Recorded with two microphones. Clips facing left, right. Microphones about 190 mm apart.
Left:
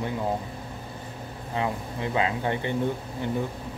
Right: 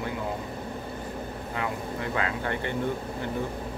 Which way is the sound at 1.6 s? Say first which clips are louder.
Left 3 dB; 20° left (ahead or behind).